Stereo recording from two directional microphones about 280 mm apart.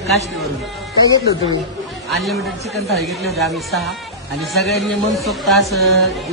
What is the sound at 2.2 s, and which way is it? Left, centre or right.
A woman's voice, centre.